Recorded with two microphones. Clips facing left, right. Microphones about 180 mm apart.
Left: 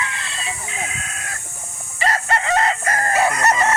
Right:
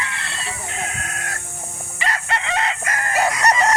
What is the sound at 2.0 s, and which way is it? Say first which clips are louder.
Chicken: left 4 dB; 40° left (ahead or behind).